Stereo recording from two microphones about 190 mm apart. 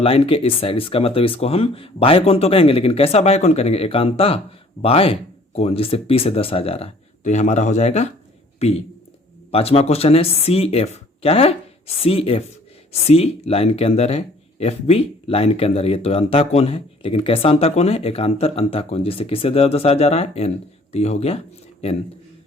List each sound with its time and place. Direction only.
0.0 s speech: 30° left (ahead or behind)